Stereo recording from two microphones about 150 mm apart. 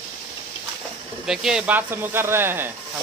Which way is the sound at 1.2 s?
5° right (ahead or behind).